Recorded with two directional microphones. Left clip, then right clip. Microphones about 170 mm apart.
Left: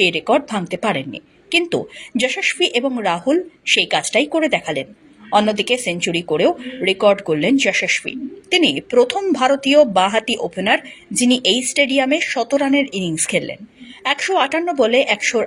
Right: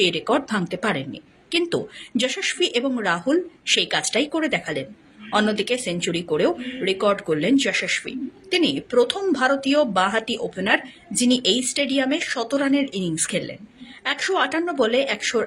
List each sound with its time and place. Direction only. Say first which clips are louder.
0.1 s speech: left 5 dB; 10° left (ahead or behind)